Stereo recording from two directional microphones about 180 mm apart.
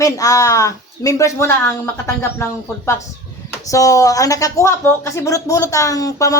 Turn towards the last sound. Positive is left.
turn(degrees=20)  # may be behind; listen again after turning